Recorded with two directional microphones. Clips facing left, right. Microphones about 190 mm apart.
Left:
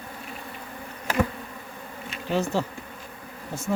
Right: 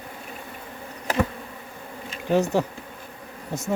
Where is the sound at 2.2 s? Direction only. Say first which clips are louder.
Right 4 dB; 15° right (ahead or behind).